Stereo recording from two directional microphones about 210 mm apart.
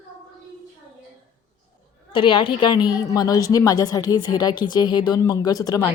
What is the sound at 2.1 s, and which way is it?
A woman's voice, 25° left (ahead or behind).